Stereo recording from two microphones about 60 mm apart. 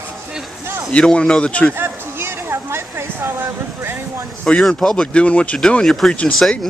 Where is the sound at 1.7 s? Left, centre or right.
Right.